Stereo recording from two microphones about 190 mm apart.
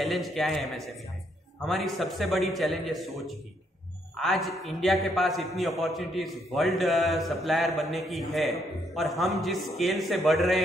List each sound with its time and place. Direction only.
0.0 s a man's voice: centre (ahead or behind)
4.2 s a man's voice: centre (ahead or behind)